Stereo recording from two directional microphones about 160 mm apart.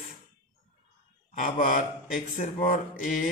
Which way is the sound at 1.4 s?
50° left (ahead or behind).